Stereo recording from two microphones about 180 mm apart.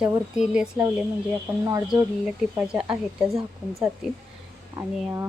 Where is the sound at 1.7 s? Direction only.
20° right (ahead or behind).